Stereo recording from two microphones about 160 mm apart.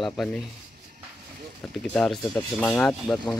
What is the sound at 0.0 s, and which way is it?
Speech, centre (ahead or behind).